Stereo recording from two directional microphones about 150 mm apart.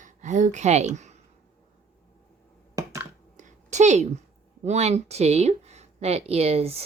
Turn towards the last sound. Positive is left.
turn(degrees=-40)  # may be behind; listen again after turning